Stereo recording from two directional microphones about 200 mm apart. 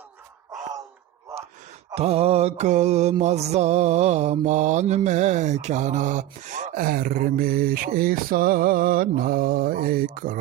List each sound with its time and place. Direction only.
1.9 s mantra: 30° right (ahead or behind); by 10.3 s 45° right (ahead or behind)